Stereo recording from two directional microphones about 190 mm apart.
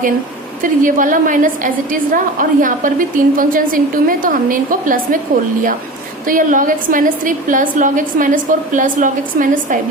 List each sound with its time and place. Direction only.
0.6 s a woman's voice: 45° right (ahead or behind)
6.2 s a woman's voice: 45° right (ahead or behind)